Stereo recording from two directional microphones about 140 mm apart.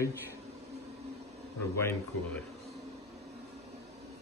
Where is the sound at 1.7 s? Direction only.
20° left (ahead or behind).